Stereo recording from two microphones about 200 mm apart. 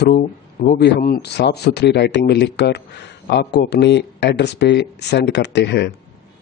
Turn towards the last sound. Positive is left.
turn(degrees=60)  # may be behind; listen again after turning